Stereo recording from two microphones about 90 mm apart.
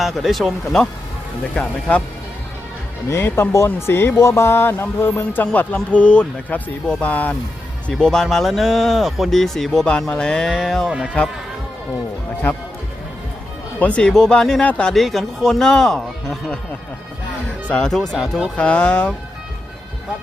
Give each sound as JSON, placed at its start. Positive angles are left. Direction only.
{"t": 0.0, "sound": "speech", "side_deg": 0}
{"t": 3.1, "sound": "speech", "side_deg": 25}
{"t": 7.9, "sound": "speech", "side_deg": 5}
{"t": 13.7, "sound": "speech", "side_deg": 15}
{"t": 17.7, "sound": "speech", "side_deg": 5}